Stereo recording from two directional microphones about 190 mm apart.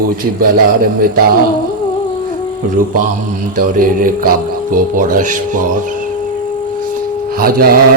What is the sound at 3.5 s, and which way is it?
Mantra, 45° right (ahead or behind).